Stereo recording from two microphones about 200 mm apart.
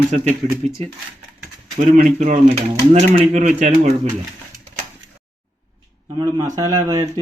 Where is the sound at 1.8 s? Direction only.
40° right (ahead or behind).